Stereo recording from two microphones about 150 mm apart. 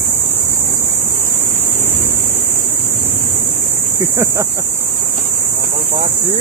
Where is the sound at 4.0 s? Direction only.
20° right (ahead or behind).